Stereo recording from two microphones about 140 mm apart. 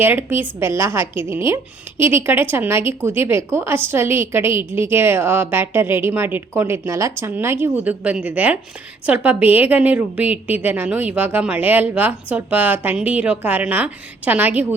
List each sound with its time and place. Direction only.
0.0 s speech: 15° right (ahead or behind)